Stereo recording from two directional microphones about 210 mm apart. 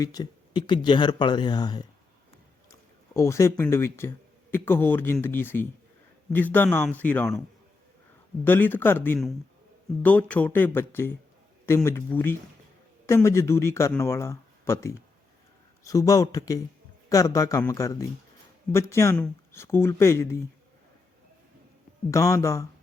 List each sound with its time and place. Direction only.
0.0 s speech: 15° left (ahead or behind)
3.2 s speech: 15° left (ahead or behind)
8.4 s speech: 10° left (ahead or behind)
22.1 s speech: 15° left (ahead or behind)